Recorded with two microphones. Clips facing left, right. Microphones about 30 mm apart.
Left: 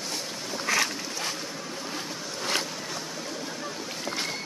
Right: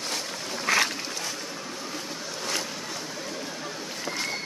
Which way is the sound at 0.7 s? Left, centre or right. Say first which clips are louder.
Right 2 dB; right.